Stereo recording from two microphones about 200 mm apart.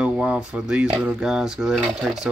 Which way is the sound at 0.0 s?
5° right (ahead or behind).